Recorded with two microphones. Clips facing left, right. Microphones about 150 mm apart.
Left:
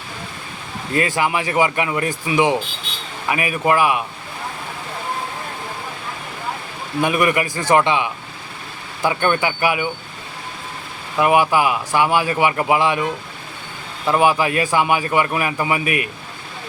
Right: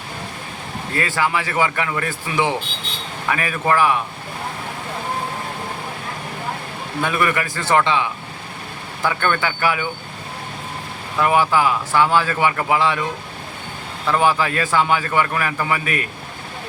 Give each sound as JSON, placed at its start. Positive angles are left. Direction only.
{"t": 0.9, "sound": "speech", "side_deg": 15}
{"t": 7.0, "sound": "speech", "side_deg": 15}
{"t": 11.2, "sound": "speech", "side_deg": 15}
{"t": 14.1, "sound": "speech", "side_deg": 15}